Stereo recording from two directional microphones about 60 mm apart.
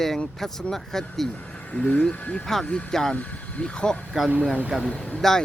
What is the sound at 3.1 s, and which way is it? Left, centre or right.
Speech, centre.